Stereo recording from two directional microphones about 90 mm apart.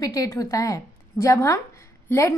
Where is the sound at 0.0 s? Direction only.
40° left (ahead or behind).